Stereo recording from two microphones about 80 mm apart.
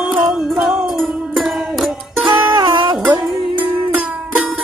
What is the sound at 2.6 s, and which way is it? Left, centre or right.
Music, right.